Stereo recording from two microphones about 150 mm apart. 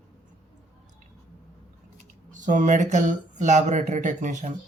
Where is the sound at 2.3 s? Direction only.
60° right (ahead or behind).